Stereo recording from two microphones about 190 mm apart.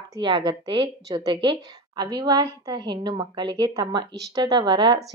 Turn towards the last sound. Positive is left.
turn(degrees=-25)  # may be behind; listen again after turning